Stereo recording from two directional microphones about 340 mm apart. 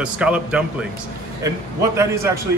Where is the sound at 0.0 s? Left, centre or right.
Centre.